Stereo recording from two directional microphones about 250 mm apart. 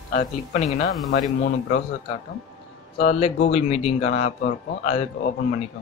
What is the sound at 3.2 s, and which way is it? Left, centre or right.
Speech, left.